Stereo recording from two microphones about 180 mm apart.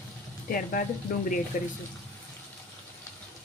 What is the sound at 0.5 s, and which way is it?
Speech, 50° left (ahead or behind).